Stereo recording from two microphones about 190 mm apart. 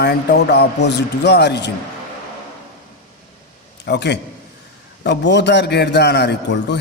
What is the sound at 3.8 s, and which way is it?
A man's voice, 65° left (ahead or behind).